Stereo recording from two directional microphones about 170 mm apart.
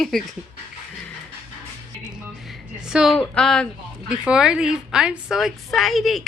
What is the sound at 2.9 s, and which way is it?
A woman's voice, 5° right (ahead or behind).